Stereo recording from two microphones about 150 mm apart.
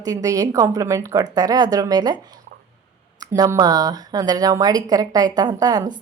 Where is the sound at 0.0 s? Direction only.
25° right (ahead or behind).